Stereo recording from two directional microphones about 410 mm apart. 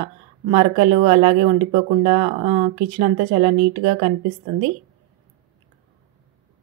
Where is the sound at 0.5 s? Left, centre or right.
Centre.